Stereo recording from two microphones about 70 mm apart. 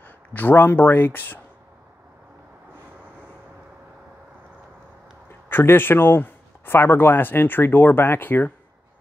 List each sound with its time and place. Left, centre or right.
0.3 s speech: left
5.5 s speech: left